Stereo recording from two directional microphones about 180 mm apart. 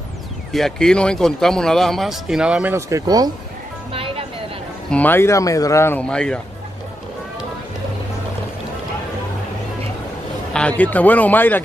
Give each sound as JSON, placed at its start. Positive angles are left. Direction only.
{"t": 0.5, "sound": "speech", "side_deg": 0}
{"t": 3.9, "sound": "music", "side_deg": -30}
{"t": 4.9, "sound": "speech", "side_deg": 10}
{"t": 10.5, "sound": "speech", "side_deg": 5}